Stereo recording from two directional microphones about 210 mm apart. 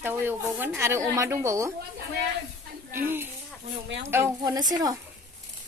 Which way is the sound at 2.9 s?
10° right (ahead or behind).